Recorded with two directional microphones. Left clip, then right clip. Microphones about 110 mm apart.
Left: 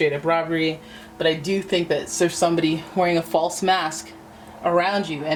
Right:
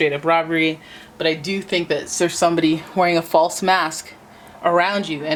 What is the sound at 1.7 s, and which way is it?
Speech, 40° right (ahead or behind).